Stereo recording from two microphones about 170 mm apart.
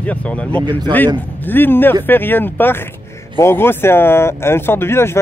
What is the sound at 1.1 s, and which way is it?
Speech, 10° left (ahead or behind).